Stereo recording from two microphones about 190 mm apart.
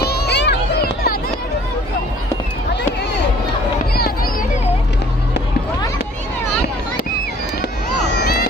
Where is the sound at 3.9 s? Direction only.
55° left (ahead or behind).